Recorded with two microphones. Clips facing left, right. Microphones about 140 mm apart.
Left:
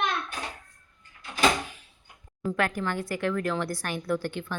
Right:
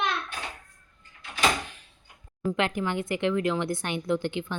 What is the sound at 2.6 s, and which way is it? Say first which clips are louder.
A woman's voice: even; 20° right (ahead or behind).